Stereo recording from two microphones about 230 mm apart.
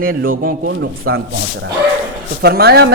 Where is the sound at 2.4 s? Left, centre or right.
Right.